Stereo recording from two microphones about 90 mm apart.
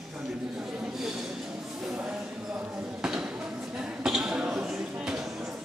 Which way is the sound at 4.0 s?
5° right (ahead or behind).